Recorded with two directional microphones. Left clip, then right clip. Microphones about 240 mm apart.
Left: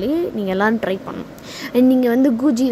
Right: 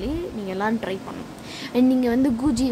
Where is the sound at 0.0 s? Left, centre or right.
Centre.